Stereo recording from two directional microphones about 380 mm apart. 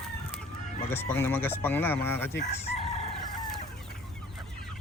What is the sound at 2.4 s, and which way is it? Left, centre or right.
Chicken, centre.